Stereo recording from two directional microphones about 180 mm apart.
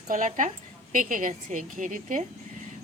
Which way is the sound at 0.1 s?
45° right (ahead or behind).